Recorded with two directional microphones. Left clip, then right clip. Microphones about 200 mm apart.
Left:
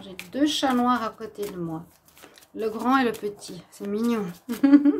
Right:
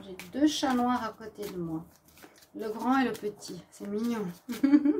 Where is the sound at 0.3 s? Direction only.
30° left (ahead or behind).